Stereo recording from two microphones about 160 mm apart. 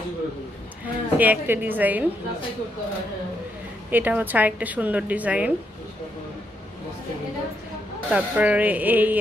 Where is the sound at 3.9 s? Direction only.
10° right (ahead or behind).